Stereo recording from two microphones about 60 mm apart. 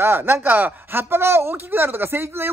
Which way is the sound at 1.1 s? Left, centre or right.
Right.